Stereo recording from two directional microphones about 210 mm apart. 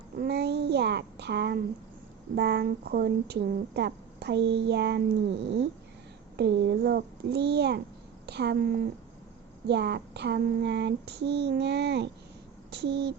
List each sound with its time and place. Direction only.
0.2 s a child's voice: 50° right (ahead or behind)
6.3 s speech: 55° right (ahead or behind)